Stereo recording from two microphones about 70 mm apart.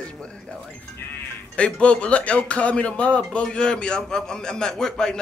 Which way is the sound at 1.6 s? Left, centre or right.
Centre.